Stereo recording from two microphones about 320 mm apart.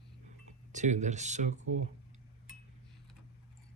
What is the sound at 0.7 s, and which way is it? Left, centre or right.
Speech, right.